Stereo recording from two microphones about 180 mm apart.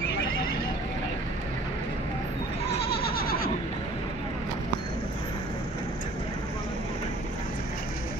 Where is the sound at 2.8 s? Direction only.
60° left (ahead or behind).